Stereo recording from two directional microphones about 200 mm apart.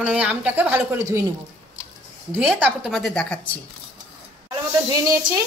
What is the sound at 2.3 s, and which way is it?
A woman's voice, 5° right (ahead or behind).